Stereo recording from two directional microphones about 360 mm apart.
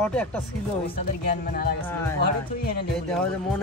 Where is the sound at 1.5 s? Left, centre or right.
Left.